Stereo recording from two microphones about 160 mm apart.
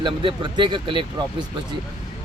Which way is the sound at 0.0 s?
30° right (ahead or behind).